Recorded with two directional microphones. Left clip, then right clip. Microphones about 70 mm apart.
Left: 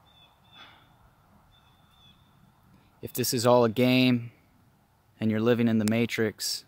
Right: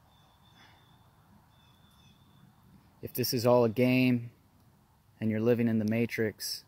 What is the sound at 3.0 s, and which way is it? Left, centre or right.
Speech, left.